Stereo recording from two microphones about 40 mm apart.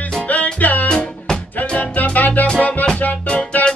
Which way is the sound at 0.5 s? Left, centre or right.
Left.